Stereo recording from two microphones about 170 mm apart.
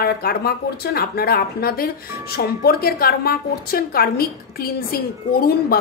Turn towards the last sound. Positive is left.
turn(degrees=60)  # may be behind; listen again after turning